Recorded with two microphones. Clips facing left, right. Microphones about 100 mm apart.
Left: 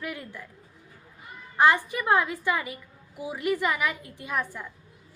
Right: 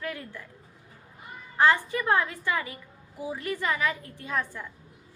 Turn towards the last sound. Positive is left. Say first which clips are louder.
# even
turn(degrees=15)  # may be behind; listen again after turning